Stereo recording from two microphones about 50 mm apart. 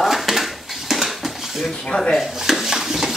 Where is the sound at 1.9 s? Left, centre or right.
Centre.